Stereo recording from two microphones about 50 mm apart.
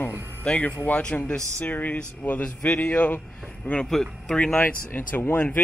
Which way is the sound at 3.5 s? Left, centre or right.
Left.